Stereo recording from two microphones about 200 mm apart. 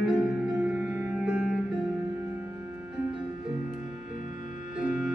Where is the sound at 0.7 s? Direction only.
5° right (ahead or behind).